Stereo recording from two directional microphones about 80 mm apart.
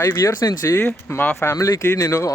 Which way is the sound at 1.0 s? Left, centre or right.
Left.